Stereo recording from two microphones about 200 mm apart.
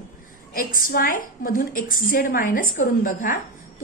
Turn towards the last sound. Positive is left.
turn(degrees=40)  # may be behind; listen again after turning